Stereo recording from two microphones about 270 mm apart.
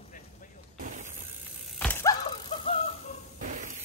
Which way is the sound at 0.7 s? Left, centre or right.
Right.